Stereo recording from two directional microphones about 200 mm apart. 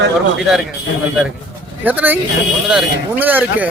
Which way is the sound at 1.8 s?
10° right (ahead or behind).